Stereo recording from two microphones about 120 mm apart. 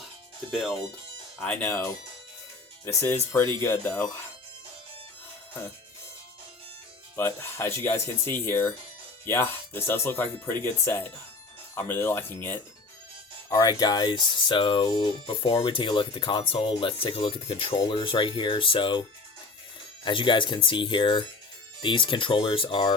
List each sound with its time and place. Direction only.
1.5 s speech: 10° left (ahead or behind)
7.2 s speech: 20° left (ahead or behind)
13.5 s speech: 30° left (ahead or behind)
20.1 s speech: 45° left (ahead or behind)